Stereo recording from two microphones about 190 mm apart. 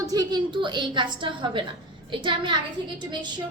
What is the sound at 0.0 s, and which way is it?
A woman's voice, 20° right (ahead or behind).